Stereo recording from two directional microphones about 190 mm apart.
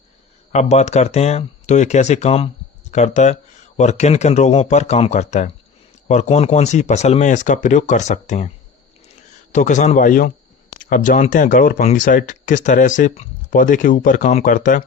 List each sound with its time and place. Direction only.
0.5 s speech: 35° left (ahead or behind)